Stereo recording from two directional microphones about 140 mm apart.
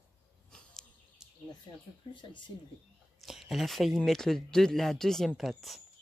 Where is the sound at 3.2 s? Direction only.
Centre (ahead or behind).